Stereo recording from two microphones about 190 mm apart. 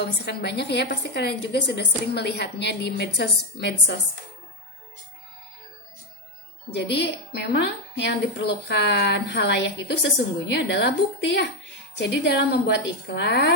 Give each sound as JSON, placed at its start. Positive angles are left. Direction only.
{"t": 0.0, "sound": "a woman's voice", "side_deg": 60}
{"t": 6.7, "sound": "a woman's voice", "side_deg": 65}